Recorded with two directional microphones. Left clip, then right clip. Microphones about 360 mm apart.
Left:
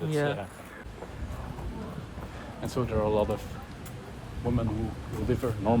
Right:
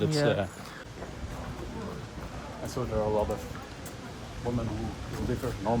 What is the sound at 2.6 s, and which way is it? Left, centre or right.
Speech, left.